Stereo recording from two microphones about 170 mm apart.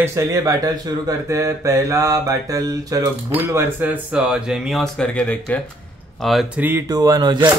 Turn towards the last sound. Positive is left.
turn(degrees=-25)  # may be behind; listen again after turning